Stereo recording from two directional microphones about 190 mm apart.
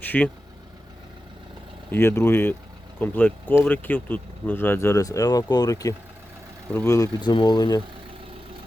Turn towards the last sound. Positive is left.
turn(degrees=20)  # may be behind; listen again after turning